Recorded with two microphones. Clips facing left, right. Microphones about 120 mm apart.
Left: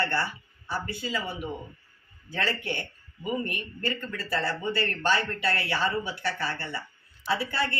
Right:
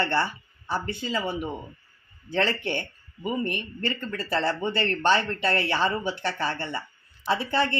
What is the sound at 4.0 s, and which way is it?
Speech, 25° right (ahead or behind).